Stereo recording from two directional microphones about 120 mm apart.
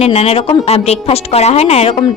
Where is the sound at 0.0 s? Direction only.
60° left (ahead or behind).